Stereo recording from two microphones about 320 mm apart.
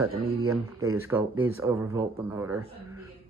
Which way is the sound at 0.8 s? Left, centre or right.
Centre.